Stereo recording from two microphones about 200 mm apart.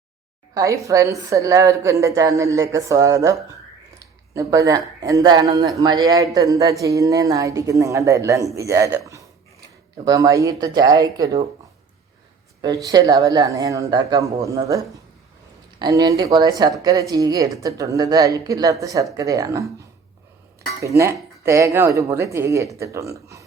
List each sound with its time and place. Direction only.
0.5 s speech: 15° right (ahead or behind)
12.6 s speech: 20° right (ahead or behind)
15.8 s speech: 20° right (ahead or behind)
20.8 s speech: 15° right (ahead or behind)